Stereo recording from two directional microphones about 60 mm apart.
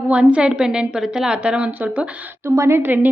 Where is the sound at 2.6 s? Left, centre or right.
Right.